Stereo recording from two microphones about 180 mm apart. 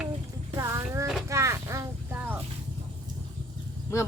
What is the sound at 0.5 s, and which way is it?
Music, 15° right (ahead or behind).